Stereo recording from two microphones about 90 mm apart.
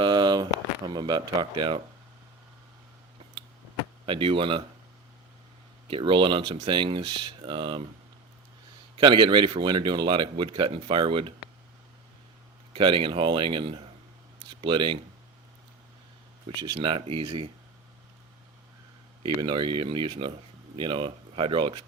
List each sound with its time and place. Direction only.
0.0 s a sound: 55° right (ahead or behind)
0.9 s speech: 50° right (ahead or behind)
4.0 s speech: 70° right (ahead or behind)
5.9 s speech: 70° right (ahead or behind)
9.0 s speech: 65° right (ahead or behind)
12.7 s speech: 70° right (ahead or behind)
16.6 s speech: 60° right (ahead or behind)
19.2 s speech: 60° right (ahead or behind)